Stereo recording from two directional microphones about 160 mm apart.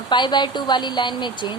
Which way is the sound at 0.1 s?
30° left (ahead or behind).